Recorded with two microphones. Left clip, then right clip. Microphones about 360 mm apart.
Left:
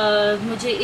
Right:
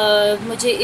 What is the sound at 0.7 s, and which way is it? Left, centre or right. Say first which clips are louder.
Speech: right 5 dB; centre.